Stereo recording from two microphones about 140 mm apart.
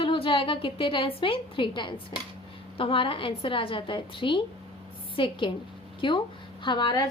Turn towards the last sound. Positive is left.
turn(degrees=35)  # may be behind; listen again after turning